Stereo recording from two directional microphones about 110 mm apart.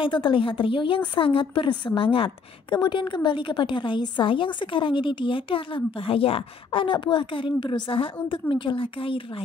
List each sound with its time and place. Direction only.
0.0 s a woman's voice: 50° left (ahead or behind)